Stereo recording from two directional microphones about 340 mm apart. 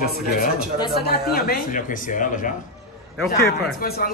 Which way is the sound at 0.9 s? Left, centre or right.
Left.